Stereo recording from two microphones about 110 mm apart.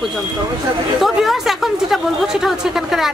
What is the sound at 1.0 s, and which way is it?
A woman's voice, centre (ahead or behind).